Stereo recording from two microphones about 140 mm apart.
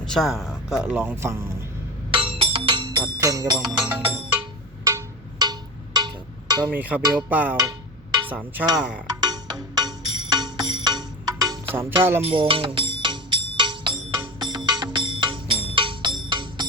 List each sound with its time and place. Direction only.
0.0 s speech: 5° left (ahead or behind); by 1.5 s 20° right (ahead or behind)
2.0 s music: 40° right (ahead or behind)
3.6 s music: 5° right (ahead or behind)
4.8 s music: 25° right (ahead or behind)
6.7 s a sound: 10° right (ahead or behind)
7.0 s music: 25° right (ahead or behind)
7.3 s a sound: 10° right (ahead or behind)
9.2 s music: 30° right (ahead or behind)
11.7 s a sound: 15° right (ahead or behind)
12.2 s music: 40° right (ahead or behind)